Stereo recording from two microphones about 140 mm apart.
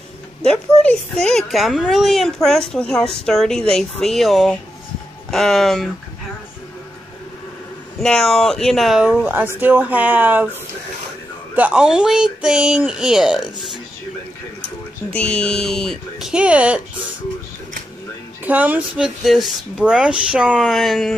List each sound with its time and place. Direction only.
0.4 s speech: 5° left (ahead or behind)
8.0 s speech: 5° left (ahead or behind)
9.2 s speech: 15° right (ahead or behind)
11.5 s speech: 10° right (ahead or behind)
15.1 s speech: 5° left (ahead or behind); by 16.8 s 10° right (ahead or behind)
18.4 s speech: 10° right (ahead or behind)